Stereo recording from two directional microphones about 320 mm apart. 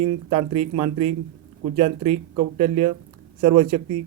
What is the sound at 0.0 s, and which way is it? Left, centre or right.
Speech, centre.